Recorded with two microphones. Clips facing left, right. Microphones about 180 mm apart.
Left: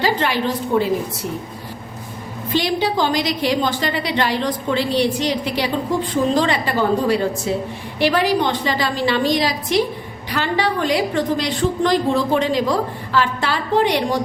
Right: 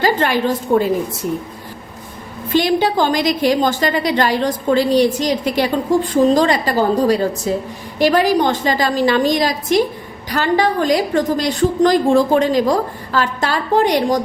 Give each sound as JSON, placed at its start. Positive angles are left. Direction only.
{"t": 0.0, "sound": "a woman's voice", "side_deg": -45}
{"t": 2.5, "sound": "a woman's voice", "side_deg": -50}